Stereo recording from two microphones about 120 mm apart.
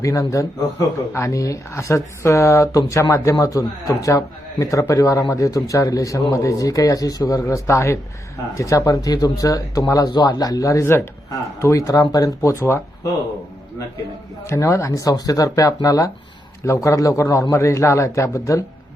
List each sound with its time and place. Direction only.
0.0 s speech: 25° left (ahead or behind)
14.4 s speech: 25° left (ahead or behind)